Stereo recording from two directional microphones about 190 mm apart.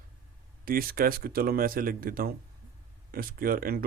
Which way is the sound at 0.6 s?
50° right (ahead or behind).